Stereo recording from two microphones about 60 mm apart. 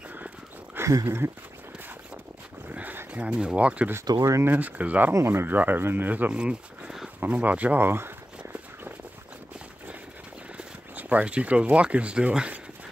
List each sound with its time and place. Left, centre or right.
1.0 s speech: right
2.7 s a sound: right
3.1 s speech: centre
4.0 s speech: right
4.5 s speech: right
5.2 s speech: right
7.8 s speech: right
10.6 s speech: right